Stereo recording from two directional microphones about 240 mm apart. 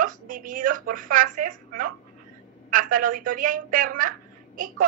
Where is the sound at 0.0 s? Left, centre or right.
Right.